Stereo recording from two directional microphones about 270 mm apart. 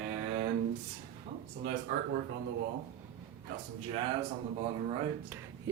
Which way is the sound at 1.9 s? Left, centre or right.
Right.